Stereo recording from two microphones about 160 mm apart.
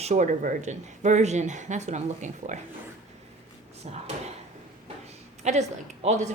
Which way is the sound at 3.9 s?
40° right (ahead or behind).